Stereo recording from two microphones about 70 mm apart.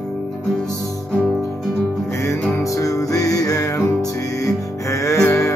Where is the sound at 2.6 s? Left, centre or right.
Left.